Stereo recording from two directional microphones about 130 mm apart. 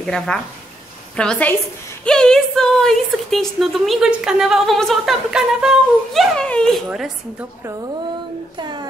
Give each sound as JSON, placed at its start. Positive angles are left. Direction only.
{"t": 0.0, "sound": "a woman's voice", "side_deg": 5}
{"t": 6.9, "sound": "a woman's voice", "side_deg": -10}
{"t": 8.5, "sound": "a child's voice", "side_deg": -35}